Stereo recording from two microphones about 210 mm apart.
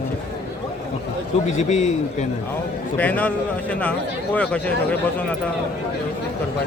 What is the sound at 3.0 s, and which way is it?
Speech, 10° left (ahead or behind).